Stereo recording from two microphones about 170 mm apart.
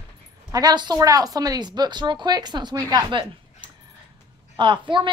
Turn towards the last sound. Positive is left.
turn(degrees=-30)  # may be behind; listen again after turning